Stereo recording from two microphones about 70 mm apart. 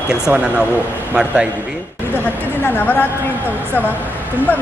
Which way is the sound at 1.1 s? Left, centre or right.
Centre.